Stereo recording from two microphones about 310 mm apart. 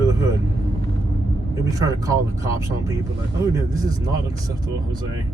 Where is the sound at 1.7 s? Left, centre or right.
Centre.